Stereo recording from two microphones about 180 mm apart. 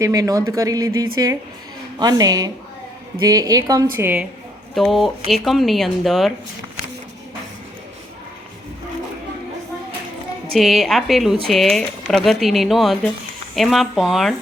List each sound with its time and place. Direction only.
0.0 s a woman's voice: 20° right (ahead or behind); by 6.3 s centre (ahead or behind)
10.5 s speech: centre (ahead or behind)